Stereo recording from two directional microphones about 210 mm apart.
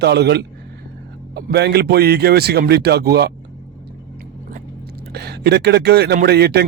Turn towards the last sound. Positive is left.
turn(degrees=-50)  # may be behind; listen again after turning